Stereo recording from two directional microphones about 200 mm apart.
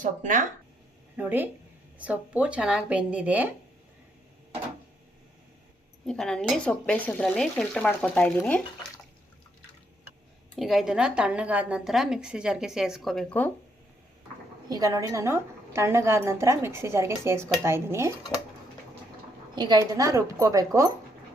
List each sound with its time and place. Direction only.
0.0 s speech: 40° right (ahead or behind)
1.1 s a woman's voice: 10° right (ahead or behind)
6.1 s a woman's voice: 5° left (ahead or behind)
10.5 s a woman's voice: centre (ahead or behind)
14.7 s a woman's voice: 15° right (ahead or behind)
19.5 s a woman's voice: 20° right (ahead or behind)